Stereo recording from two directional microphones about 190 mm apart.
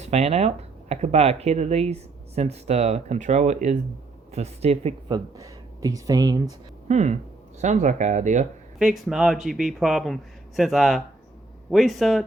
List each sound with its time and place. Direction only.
0.0 s speech: 35° right (ahead or behind)
6.8 s speech: 40° right (ahead or behind)
8.8 s speech: centre (ahead or behind)